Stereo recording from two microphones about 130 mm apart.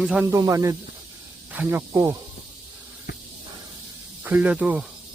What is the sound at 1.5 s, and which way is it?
Speech, 10° right (ahead or behind).